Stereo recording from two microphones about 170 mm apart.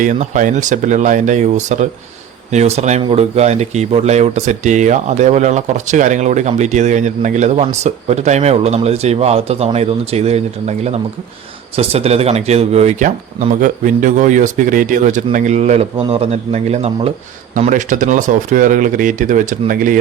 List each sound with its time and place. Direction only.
0.0 s a man's voice: 50° right (ahead or behind)
16.0 s speech: 30° right (ahead or behind)
17.7 s a man's voice: 50° right (ahead or behind)